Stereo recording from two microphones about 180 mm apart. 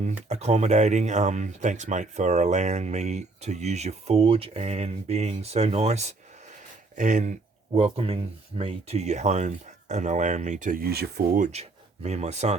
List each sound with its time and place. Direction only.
0.3 s speech: 35° right (ahead or behind)
7.8 s speech: 30° right (ahead or behind)